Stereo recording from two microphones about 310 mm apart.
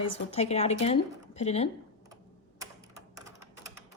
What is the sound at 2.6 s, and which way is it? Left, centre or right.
Typing, centre.